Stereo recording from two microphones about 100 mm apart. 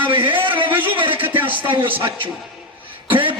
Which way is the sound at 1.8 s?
60° right (ahead or behind).